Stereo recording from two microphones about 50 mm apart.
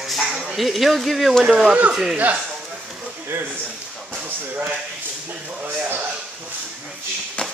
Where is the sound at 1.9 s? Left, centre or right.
Centre.